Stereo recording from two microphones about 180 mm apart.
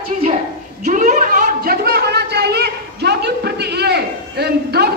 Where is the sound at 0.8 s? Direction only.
45° right (ahead or behind).